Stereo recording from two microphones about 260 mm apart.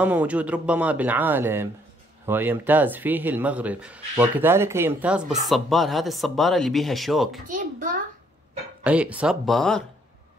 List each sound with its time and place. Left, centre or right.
0.0 s speech: centre
7.4 s a child's voice: right
8.8 s speech: centre